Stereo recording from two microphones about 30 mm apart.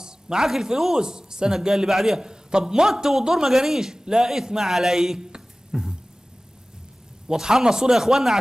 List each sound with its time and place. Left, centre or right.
0.0 s a man's voice: centre
4.6 s speech: centre
7.2 s speech: centre